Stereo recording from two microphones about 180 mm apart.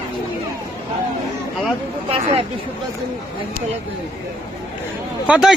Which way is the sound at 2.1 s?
30° right (ahead or behind).